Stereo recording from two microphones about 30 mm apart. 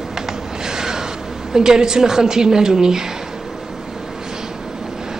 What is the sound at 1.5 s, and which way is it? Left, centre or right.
A woman's voice, right.